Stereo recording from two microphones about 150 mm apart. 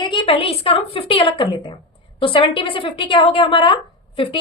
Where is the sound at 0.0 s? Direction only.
35° left (ahead or behind).